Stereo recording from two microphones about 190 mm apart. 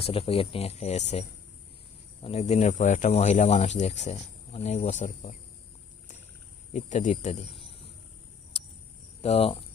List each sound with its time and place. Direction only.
0.0 s speech: 30° left (ahead or behind)
2.2 s speech: 35° left (ahead or behind)
6.7 s speech: 40° left (ahead or behind)
9.2 s speech: 30° left (ahead or behind)